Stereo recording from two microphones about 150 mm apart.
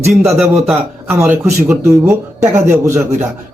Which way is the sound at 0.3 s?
Centre (ahead or behind).